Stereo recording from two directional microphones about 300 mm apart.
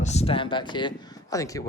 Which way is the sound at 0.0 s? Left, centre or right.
Left.